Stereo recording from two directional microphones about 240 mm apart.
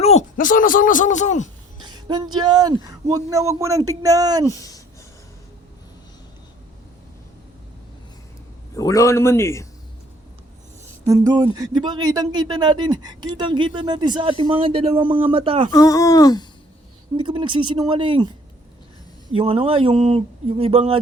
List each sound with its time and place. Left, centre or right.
0.0 s speech: left
1.8 s speech: centre
8.7 s a man's voice: centre
11.0 s speech: centre
15.7 s a man's voice: centre
17.2 s speech: right
19.4 s speech: right